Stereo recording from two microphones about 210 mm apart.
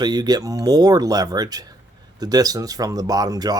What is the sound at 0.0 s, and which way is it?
Speech, 20° right (ahead or behind).